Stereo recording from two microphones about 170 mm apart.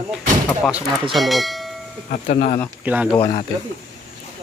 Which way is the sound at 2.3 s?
45° left (ahead or behind).